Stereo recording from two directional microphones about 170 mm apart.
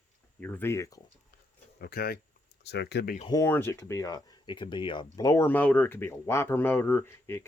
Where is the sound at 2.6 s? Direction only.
80° left.